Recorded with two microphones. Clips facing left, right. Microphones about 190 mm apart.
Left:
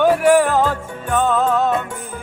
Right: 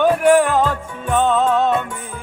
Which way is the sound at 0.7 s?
20° right (ahead or behind).